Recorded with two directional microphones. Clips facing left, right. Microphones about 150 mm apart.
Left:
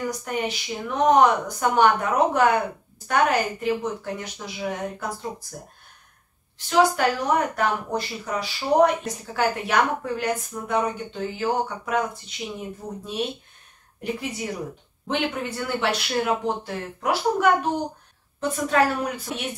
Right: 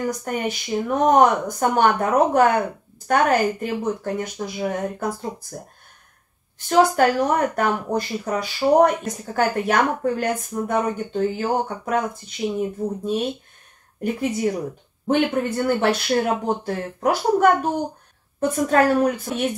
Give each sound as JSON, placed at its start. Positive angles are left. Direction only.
{"t": 0.1, "sound": "speech", "side_deg": -50}
{"t": 6.7, "sound": "speech", "side_deg": -50}
{"t": 15.0, "sound": "speech", "side_deg": -45}